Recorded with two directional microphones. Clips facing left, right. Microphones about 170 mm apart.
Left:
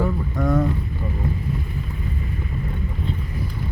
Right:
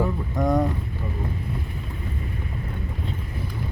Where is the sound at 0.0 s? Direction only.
20° right (ahead or behind).